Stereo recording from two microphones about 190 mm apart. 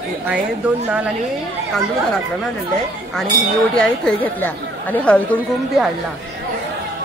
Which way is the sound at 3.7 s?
5° left (ahead or behind).